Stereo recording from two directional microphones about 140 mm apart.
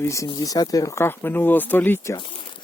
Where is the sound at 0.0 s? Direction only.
20° left (ahead or behind).